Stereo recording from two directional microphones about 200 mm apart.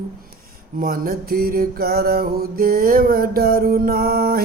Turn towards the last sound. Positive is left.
turn(degrees=-50)  # may be behind; listen again after turning